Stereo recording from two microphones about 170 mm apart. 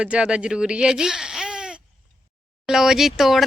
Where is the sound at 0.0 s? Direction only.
5° right (ahead or behind).